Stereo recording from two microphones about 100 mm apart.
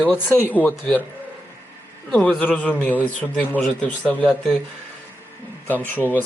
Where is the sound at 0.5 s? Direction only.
15° left (ahead or behind).